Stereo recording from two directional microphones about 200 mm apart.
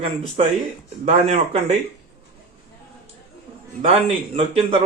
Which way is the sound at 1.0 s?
35° right (ahead or behind).